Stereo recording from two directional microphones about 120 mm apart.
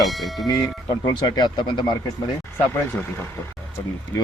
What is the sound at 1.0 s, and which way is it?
Speech, 35° left (ahead or behind).